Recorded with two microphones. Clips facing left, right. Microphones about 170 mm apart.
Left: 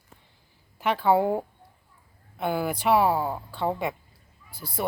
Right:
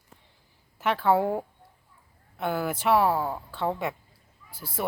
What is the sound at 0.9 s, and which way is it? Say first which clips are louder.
Speech: left 2 dB; 10° left (ahead or behind).